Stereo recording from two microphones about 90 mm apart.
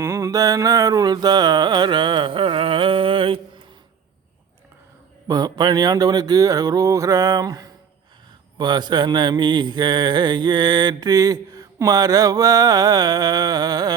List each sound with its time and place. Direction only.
0.0 s music: 30° right (ahead or behind); by 3.4 s 80° right
5.3 s mantra: 50° right (ahead or behind)
8.5 s mantra: 55° right (ahead or behind)